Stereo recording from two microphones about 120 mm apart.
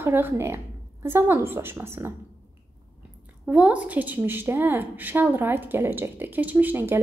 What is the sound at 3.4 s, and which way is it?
A woman's voice, 10° right (ahead or behind).